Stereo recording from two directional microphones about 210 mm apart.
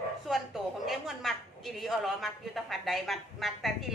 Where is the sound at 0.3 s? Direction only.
Centre (ahead or behind).